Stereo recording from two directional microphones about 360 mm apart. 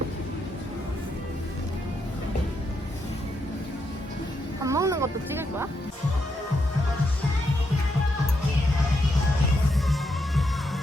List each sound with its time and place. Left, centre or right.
4.6 s speech: centre